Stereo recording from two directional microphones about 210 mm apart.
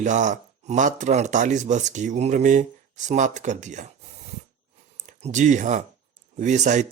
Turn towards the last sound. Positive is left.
turn(degrees=-35)  # may be behind; listen again after turning